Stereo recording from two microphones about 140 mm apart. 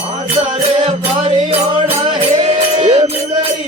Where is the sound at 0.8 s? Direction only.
45° right (ahead or behind).